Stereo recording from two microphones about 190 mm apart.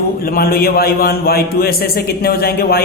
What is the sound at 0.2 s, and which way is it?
A woman's voice, 50° left (ahead or behind).